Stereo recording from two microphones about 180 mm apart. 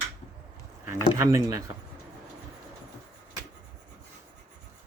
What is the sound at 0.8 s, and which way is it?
Speech, 15° right (ahead or behind).